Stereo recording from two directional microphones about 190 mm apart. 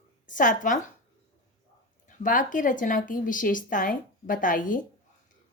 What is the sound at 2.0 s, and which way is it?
A woman's voice, 45° left (ahead or behind).